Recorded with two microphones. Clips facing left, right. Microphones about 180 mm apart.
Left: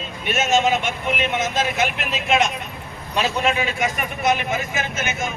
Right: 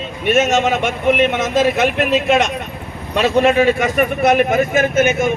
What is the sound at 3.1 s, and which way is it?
A man's voice, 60° right (ahead or behind).